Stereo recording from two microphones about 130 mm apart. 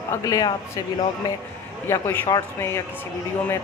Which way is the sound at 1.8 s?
20° left (ahead or behind).